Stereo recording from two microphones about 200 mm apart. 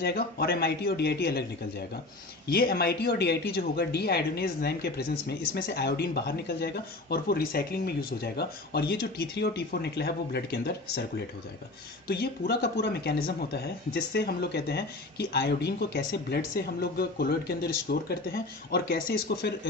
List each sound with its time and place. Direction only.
0.0 s speech: 50° left (ahead or behind)
2.4 s speech: 50° left (ahead or behind)
12.1 s speech: 50° left (ahead or behind)